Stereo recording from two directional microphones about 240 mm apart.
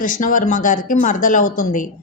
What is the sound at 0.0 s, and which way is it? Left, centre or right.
A woman's voice, left.